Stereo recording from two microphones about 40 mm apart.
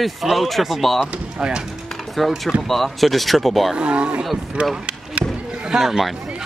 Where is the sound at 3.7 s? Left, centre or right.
Right.